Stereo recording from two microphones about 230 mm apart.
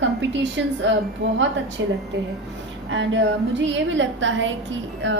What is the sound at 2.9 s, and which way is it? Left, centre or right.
A woman's voice, right.